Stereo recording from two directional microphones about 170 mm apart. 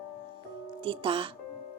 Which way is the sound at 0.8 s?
30° right (ahead or behind).